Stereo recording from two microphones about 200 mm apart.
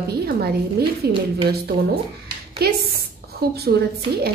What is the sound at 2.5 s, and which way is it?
A woman's voice, 50° right (ahead or behind).